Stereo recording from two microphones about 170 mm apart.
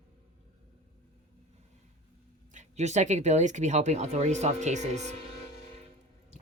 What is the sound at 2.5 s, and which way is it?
Speech, 45° right (ahead or behind).